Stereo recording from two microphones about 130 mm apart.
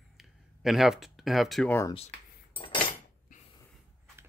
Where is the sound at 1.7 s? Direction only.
20° left (ahead or behind).